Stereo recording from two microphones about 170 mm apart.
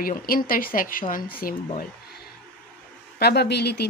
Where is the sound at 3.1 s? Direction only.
70° left (ahead or behind).